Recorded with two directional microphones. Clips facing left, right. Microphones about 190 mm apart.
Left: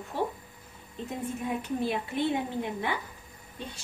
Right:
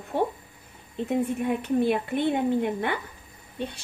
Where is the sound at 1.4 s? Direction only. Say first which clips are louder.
Right 7 dB; 60° right (ahead or behind).